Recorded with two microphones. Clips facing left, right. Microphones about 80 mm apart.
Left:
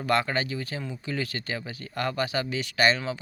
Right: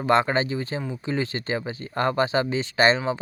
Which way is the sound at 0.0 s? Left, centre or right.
Right.